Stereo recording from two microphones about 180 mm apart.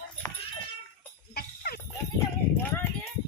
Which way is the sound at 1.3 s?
55° left (ahead or behind).